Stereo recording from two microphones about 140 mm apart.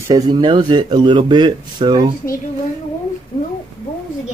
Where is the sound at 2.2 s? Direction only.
90° left.